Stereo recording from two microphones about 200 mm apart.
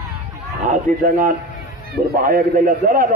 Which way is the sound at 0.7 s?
45° right (ahead or behind).